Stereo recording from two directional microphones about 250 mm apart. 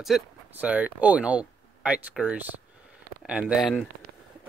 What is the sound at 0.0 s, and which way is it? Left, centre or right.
Speech, centre.